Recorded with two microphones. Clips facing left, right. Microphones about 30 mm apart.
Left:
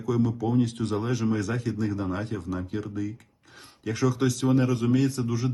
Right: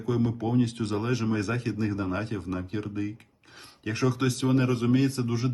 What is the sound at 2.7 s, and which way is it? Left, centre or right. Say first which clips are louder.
A man's voice: even; right.